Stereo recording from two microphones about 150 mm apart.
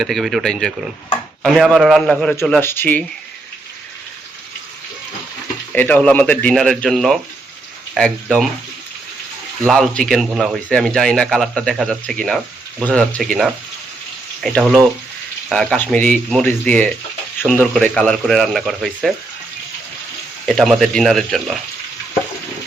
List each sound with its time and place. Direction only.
0.0 s speech: centre (ahead or behind)
5.7 s speech: 10° left (ahead or behind)
9.6 s speech: 5° left (ahead or behind)
20.5 s speech: 5° left (ahead or behind)